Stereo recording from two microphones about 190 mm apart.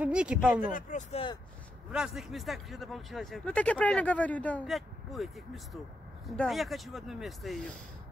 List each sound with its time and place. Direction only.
0.0 s speech: 5° right (ahead or behind)
0.7 s speech: 40° left (ahead or behind)
1.9 s speech: 5° right (ahead or behind)